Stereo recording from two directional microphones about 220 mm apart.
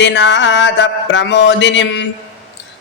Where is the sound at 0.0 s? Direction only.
55° left (ahead or behind).